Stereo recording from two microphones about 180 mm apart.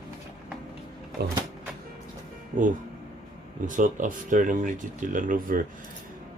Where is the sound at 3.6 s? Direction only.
45° right (ahead or behind).